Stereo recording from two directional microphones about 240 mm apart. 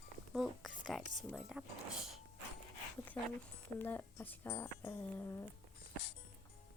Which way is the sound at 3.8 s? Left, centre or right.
Centre.